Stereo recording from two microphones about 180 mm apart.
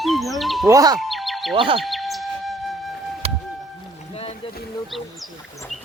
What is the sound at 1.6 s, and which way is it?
Speech, 30° right (ahead or behind).